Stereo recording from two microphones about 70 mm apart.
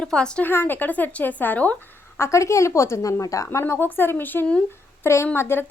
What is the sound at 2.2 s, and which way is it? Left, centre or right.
A woman's voice, left.